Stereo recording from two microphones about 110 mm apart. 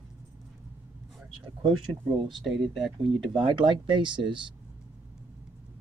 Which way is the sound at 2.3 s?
Centre (ahead or behind).